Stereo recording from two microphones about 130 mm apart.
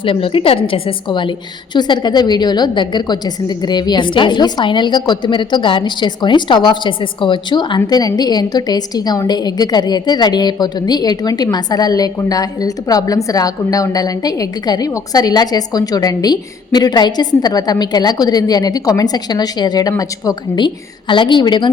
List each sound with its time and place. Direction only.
0.0 s a woman's voice: 45° left (ahead or behind)